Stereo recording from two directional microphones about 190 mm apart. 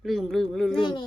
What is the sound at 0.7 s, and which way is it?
Speech, 25° left (ahead or behind).